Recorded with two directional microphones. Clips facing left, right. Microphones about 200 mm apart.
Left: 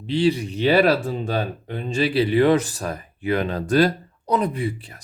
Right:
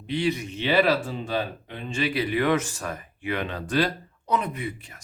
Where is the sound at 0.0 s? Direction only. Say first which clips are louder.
Left 6 dB; 30° left (ahead or behind).